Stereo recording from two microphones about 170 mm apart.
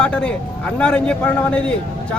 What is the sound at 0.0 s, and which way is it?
Speech, 5° left (ahead or behind).